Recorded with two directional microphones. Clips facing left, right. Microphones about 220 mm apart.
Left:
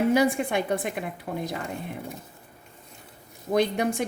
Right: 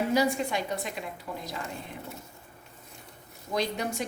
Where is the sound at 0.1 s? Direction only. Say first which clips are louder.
Left 4 dB; 55° left (ahead or behind).